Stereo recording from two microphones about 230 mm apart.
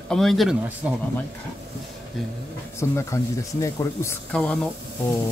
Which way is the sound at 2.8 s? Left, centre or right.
Centre.